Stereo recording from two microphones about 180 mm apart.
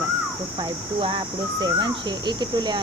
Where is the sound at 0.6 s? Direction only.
30° right (ahead or behind).